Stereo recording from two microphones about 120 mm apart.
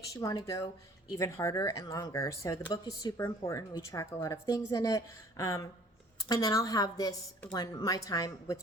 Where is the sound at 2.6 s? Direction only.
35° left (ahead or behind).